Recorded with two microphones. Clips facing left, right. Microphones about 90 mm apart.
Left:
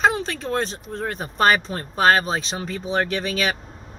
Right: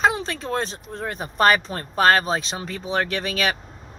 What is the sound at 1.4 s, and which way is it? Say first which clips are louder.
Speech: even; 25° left (ahead or behind).